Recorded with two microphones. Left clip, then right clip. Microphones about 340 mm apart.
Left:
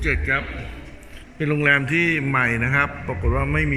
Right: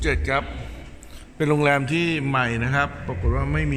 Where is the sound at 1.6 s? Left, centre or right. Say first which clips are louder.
Left 7 dB; centre.